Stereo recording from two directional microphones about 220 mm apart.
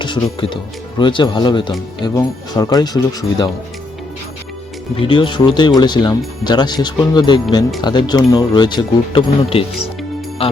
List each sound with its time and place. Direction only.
0.0 s speech: 20° left (ahead or behind)
4.9 s speech: 20° left (ahead or behind)